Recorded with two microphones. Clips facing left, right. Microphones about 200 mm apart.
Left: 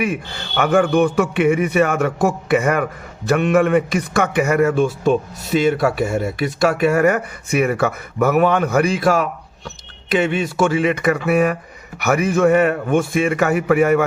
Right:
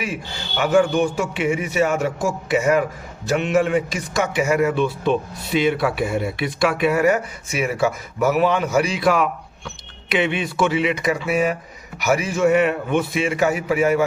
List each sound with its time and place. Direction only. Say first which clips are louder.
0.0 s a man's voice: left 6 dB; 55° left (ahead or behind)